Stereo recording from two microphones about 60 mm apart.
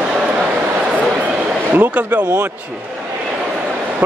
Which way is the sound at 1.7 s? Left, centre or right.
Right.